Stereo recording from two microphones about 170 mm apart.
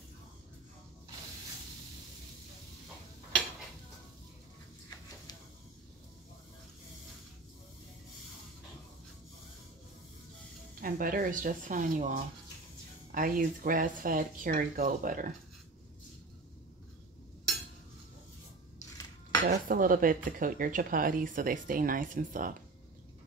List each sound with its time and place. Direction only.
10.8 s speech: 55° right (ahead or behind)
19.4 s speech: 55° right (ahead or behind)